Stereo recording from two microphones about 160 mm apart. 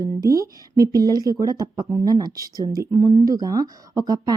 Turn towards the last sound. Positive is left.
turn(degrees=-25)  # may be behind; listen again after turning